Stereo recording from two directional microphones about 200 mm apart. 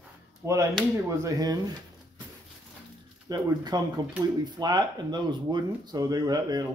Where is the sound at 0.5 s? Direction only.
15° right (ahead or behind).